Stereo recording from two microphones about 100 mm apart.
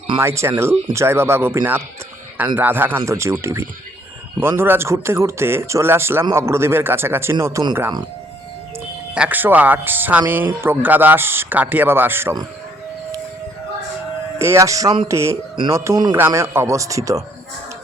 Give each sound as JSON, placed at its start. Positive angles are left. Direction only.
{"t": 0.2, "sound": "speech", "side_deg": -25}
{"t": 9.1, "sound": "speech", "side_deg": -15}
{"t": 14.3, "sound": "a man's voice", "side_deg": -25}